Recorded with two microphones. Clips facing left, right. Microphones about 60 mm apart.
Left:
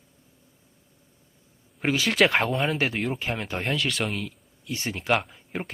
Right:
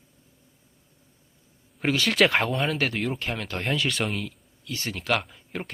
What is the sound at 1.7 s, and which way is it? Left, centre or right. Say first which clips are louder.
Speech: even; centre.